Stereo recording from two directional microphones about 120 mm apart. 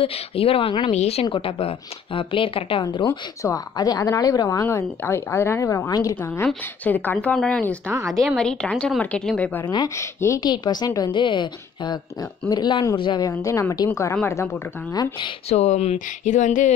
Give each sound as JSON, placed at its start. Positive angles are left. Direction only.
{"t": 0.0, "sound": "speech", "side_deg": 55}
{"t": 0.9, "sound": "a woman's voice", "side_deg": 60}
{"t": 1.2, "sound": "a woman's voice", "side_deg": 45}
{"t": 3.1, "sound": "speech", "side_deg": 25}
{"t": 6.2, "sound": "a woman's voice", "side_deg": 20}
{"t": 9.9, "sound": "speech", "side_deg": 25}
{"t": 10.4, "sound": "a woman's voice", "side_deg": 35}
{"t": 13.4, "sound": "speech", "side_deg": 25}
{"t": 15.5, "sound": "speech", "side_deg": 65}